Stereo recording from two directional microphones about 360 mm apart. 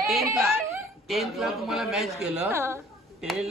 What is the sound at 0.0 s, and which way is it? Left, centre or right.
A woman's voice, centre.